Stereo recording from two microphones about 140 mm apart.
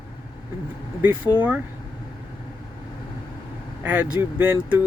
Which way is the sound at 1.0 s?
10° right (ahead or behind).